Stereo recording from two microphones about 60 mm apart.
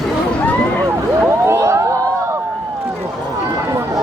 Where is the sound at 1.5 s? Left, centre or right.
Right.